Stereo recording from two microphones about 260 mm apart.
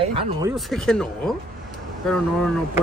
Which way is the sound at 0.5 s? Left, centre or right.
Centre.